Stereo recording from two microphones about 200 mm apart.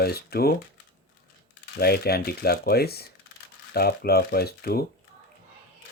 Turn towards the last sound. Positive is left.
turn(degrees=50)  # may be behind; listen again after turning